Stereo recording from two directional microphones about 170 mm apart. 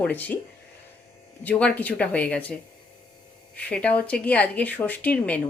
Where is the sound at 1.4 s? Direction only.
10° left (ahead or behind).